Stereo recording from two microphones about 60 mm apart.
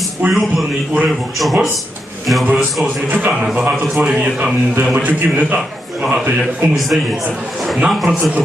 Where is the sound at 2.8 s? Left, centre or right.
Right.